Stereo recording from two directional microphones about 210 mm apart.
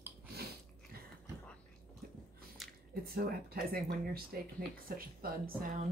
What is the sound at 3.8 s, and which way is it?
Speech, 45° right (ahead or behind).